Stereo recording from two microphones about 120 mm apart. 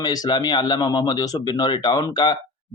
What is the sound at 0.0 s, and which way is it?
A man's voice, 35° left (ahead or behind).